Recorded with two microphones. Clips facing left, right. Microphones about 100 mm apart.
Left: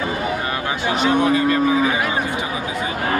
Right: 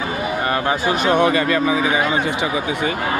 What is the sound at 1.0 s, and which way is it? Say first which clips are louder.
Speech: even; 65° right (ahead or behind).